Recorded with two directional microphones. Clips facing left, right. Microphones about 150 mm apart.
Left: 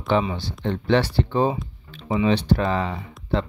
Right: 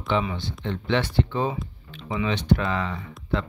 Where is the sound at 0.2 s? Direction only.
30° left (ahead or behind).